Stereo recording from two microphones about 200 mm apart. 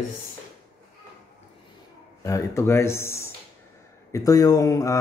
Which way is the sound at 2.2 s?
15° left (ahead or behind).